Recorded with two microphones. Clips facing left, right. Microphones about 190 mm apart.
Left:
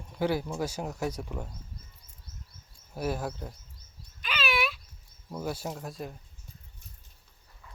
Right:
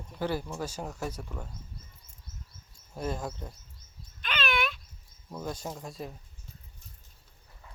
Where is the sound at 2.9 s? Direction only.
5° left (ahead or behind).